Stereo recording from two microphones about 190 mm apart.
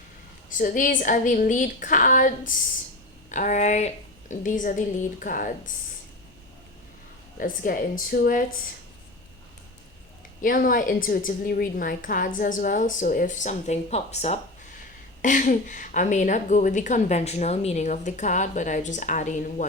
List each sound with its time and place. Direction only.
0.5 s a woman's voice: 45° left (ahead or behind)
7.3 s a woman's voice: 45° left (ahead or behind)
10.4 s a woman's voice: 45° left (ahead or behind)